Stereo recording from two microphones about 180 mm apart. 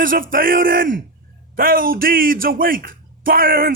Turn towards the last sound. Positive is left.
turn(degrees=-50)  # may be behind; listen again after turning